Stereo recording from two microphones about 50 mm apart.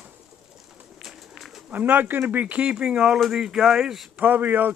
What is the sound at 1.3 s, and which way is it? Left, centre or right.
Bird, centre.